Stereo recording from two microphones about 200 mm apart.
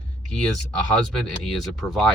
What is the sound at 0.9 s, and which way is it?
Music, centre (ahead or behind).